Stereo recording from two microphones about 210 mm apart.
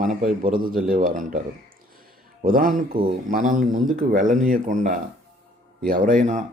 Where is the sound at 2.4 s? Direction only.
45° right (ahead or behind).